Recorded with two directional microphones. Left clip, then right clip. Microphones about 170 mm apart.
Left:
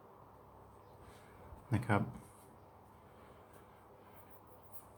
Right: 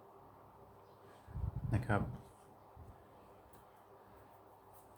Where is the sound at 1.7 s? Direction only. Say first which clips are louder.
Left 2 dB; 15° left (ahead or behind).